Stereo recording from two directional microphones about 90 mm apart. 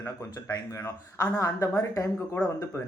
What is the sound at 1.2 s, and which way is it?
Speech, 35° left (ahead or behind).